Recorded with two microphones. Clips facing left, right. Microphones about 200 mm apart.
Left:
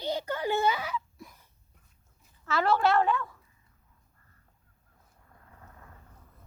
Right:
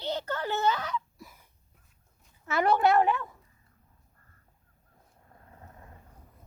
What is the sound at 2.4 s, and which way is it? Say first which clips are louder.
Speech: right 1 dB; 15° right (ahead or behind).